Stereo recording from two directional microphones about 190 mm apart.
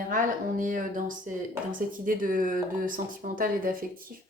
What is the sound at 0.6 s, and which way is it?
A woman's voice, 45° right (ahead or behind).